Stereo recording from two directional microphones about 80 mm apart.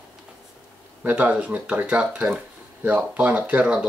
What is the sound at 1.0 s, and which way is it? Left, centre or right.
Speech, right.